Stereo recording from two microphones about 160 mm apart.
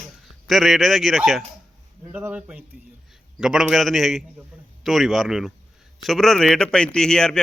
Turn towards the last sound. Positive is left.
turn(degrees=5)  # may be behind; listen again after turning